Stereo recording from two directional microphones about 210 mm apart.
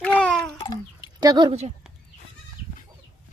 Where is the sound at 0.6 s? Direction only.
20° left (ahead or behind).